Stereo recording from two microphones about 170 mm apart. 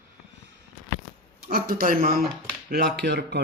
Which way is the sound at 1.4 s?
60° right (ahead or behind).